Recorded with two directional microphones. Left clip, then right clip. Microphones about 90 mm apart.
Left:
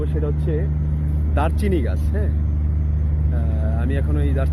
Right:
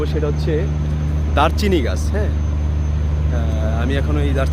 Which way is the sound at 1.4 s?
20° right (ahead or behind).